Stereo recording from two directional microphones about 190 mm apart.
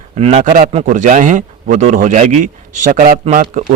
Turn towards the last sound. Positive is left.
turn(degrees=-40)  # may be behind; listen again after turning